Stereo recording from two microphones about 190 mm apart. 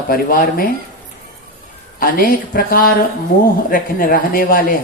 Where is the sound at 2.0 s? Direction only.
50° left (ahead or behind).